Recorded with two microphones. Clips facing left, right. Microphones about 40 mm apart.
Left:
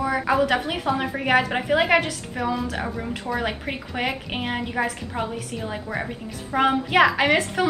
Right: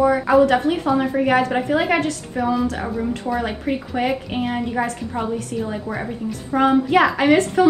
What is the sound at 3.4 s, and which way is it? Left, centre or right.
Speech, centre.